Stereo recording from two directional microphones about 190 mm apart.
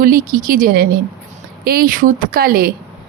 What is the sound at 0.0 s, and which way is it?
Speech, 50° right (ahead or behind).